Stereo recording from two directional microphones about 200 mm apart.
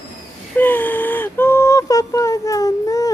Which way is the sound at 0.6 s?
10° left (ahead or behind).